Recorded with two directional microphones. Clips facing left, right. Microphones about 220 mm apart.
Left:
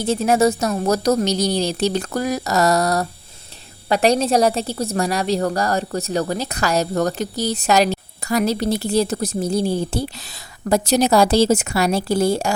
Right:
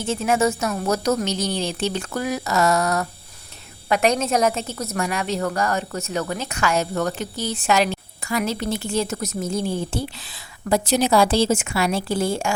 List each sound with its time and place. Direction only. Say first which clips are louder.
0.0 s a woman's voice: left 4 dB; 35° left (ahead or behind)